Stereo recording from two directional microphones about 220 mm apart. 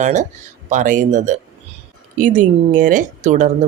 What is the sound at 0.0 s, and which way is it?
Speech, 35° right (ahead or behind).